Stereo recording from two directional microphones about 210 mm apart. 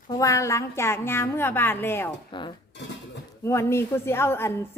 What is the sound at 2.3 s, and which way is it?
Speech, 20° left (ahead or behind).